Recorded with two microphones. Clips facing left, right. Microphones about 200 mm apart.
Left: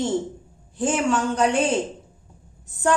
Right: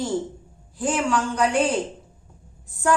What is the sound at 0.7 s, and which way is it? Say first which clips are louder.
Speech: left 1 dB; 25° left (ahead or behind).